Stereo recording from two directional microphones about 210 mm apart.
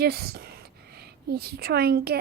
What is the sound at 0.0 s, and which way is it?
A woman's voice, 50° right (ahead or behind).